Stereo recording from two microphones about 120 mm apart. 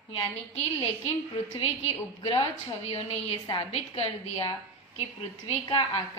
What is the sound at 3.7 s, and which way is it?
Speech, 55° left (ahead or behind).